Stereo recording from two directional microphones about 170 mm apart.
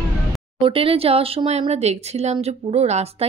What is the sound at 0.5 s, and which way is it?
Speech, 30° right (ahead or behind).